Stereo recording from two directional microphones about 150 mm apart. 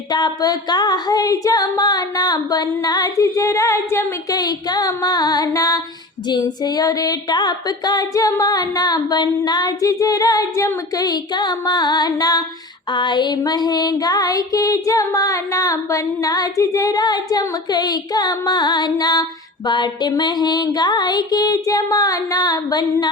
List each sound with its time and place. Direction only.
0.1 s music: 25° left (ahead or behind)